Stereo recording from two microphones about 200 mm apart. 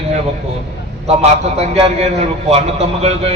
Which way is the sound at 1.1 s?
30° right (ahead or behind).